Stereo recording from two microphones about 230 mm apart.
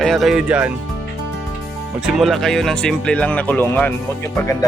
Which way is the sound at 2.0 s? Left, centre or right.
Centre.